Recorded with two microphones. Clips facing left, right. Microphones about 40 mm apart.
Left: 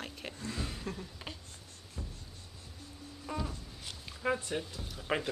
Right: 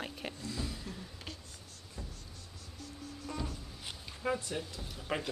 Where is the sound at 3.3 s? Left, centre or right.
Centre.